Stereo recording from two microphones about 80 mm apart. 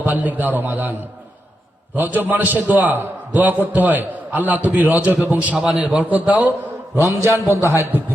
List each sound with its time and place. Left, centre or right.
0.0 s a man's voice: right
2.0 s a man's voice: right
5.5 s a man's voice: centre
6.0 s a man's voice: right
6.9 s mantra: right
7.7 s a man's voice: right